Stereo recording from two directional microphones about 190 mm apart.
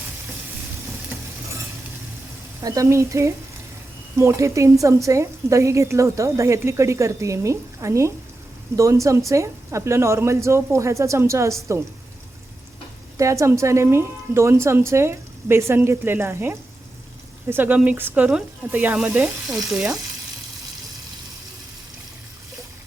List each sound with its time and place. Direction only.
2.6 s a woman's voice: 20° right (ahead or behind)
13.1 s a woman's voice: 15° right (ahead or behind)